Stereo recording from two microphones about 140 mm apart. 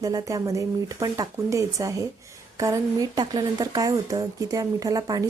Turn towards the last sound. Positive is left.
turn(degrees=-25)  # may be behind; listen again after turning